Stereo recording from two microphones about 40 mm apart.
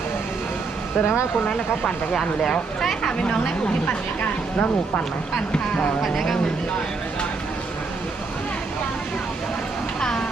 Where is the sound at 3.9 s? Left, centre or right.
Left.